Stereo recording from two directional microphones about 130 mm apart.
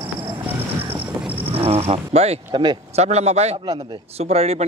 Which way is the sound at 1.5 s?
50° right (ahead or behind).